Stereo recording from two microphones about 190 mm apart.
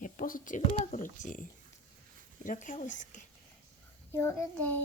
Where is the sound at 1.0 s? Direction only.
45° left (ahead or behind).